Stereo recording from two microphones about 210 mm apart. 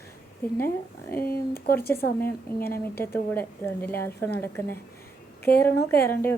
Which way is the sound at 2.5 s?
10° left (ahead or behind).